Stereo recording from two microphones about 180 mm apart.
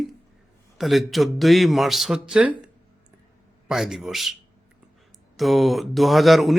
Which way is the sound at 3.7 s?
Centre (ahead or behind).